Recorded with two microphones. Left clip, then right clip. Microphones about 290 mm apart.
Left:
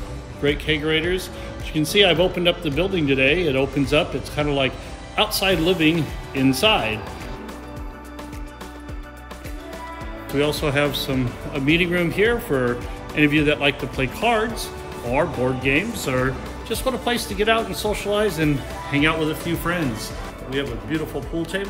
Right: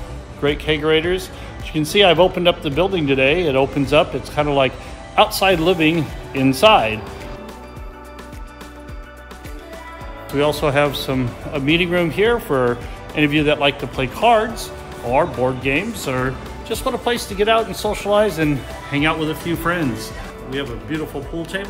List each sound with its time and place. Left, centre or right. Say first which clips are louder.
0.4 s speech: right 3 dB; centre
10.3 s speech: right 4 dB; centre
20.4 s speech: even; centre